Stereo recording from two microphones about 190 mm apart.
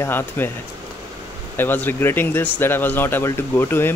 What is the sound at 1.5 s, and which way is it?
Speech, 10° left (ahead or behind).